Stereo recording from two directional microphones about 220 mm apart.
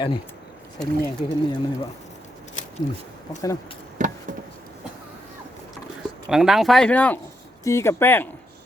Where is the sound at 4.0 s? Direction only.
35° right (ahead or behind).